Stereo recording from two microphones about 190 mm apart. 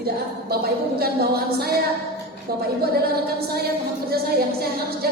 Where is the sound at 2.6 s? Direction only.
55° right (ahead or behind).